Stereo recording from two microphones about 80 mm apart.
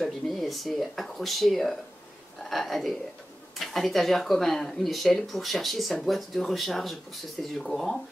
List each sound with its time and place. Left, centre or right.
0.0 s speech: centre